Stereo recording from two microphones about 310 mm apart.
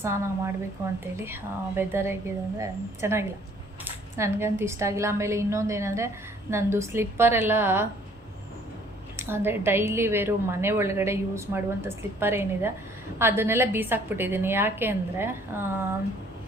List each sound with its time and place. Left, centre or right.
0.0 s a woman's voice: centre
9.1 s a woman's voice: centre